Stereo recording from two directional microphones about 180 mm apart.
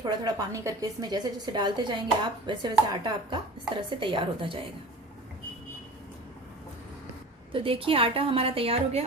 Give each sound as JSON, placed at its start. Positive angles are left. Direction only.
{"t": 0.0, "sound": "a woman's voice", "side_deg": -20}
{"t": 7.5, "sound": "a woman's voice", "side_deg": -30}